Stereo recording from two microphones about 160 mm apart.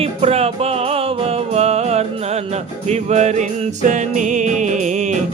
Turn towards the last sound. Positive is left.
turn(degrees=-50)  # may be behind; listen again after turning